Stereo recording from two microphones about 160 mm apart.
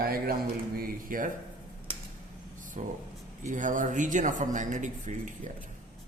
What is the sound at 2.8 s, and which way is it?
Speech, 50° right (ahead or behind).